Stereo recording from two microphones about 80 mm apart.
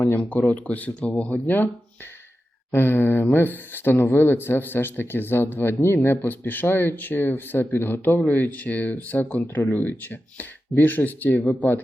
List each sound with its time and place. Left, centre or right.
0.2 s speech: centre
2.7 s speech: left